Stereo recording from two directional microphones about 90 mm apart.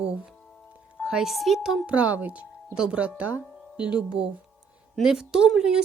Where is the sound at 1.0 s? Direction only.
5° right (ahead or behind).